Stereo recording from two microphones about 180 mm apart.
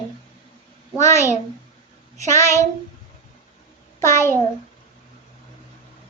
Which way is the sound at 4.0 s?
15° left (ahead or behind).